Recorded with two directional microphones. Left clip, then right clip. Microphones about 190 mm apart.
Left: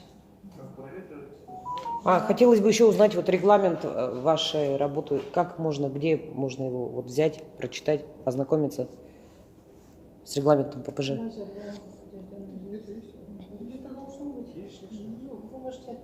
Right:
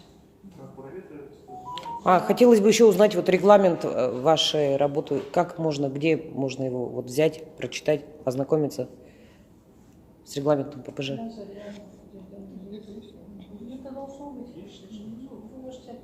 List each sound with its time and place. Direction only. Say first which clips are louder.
1.7 s speech: right 2 dB; 15° right (ahead or behind)
10.2 s a woman's voice: left 2 dB; 25° left (ahead or behind)